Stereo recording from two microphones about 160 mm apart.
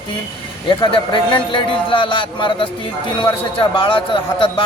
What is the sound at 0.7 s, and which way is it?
A man's voice, 30° left (ahead or behind).